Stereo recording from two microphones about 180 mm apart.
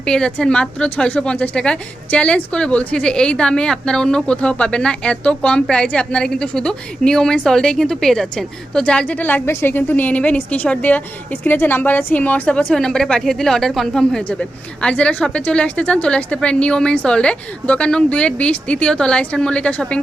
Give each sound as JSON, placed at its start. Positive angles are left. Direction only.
{"t": 0.0, "sound": "a woman's voice", "side_deg": 5}